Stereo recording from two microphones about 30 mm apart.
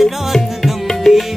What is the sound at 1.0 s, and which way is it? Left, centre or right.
Music, centre.